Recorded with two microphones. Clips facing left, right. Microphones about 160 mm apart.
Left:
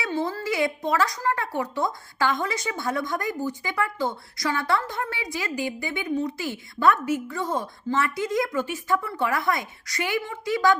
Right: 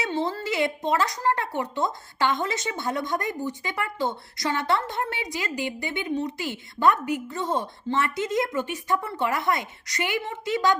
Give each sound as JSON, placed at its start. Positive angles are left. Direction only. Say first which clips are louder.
{"t": 0.0, "sound": "a woman's voice", "louder": "even", "side_deg": -25}